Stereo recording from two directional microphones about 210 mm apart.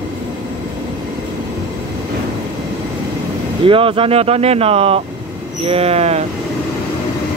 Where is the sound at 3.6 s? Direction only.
25° right (ahead or behind).